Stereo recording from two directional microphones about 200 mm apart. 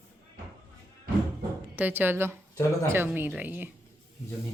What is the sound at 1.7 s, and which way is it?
A woman's voice, 10° right (ahead or behind).